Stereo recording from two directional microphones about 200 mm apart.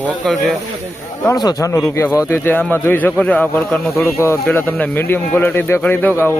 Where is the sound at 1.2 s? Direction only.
20° left (ahead or behind).